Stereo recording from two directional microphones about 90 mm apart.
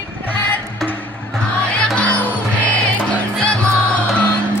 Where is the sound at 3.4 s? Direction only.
10° left (ahead or behind).